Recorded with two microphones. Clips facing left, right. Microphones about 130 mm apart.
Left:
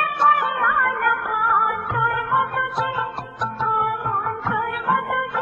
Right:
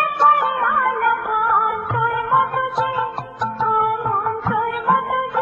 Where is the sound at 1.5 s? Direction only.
Centre (ahead or behind).